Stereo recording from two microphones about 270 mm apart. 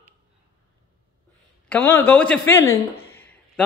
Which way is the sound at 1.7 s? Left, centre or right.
Centre.